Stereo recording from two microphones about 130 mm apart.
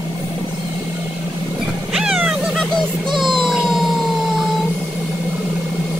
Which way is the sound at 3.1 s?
40° right (ahead or behind).